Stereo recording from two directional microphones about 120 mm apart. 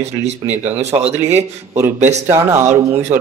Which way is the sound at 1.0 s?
65° right (ahead or behind).